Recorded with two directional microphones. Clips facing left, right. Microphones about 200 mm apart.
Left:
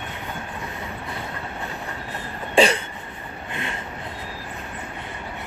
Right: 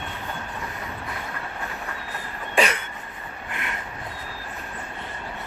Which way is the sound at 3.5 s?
30° left (ahead or behind).